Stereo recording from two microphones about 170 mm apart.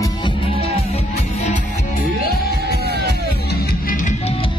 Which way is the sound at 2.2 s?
70° left (ahead or behind).